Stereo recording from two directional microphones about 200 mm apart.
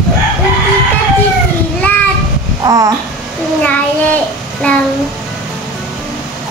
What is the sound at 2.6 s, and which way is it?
Speech, 20° right (ahead or behind).